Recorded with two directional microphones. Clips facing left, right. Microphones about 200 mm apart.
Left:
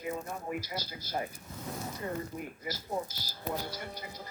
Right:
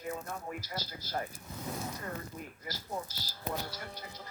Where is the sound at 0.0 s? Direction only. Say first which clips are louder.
Left 2 dB; 10° left (ahead or behind).